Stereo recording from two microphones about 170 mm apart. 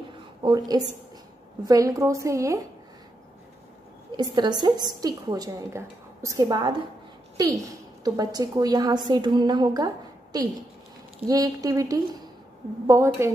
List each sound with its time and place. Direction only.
0.4 s a woman's voice: 25° right (ahead or behind)
4.2 s a woman's voice: 25° right (ahead or behind)